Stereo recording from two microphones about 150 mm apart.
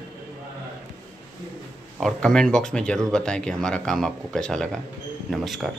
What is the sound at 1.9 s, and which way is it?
Speech, centre (ahead or behind).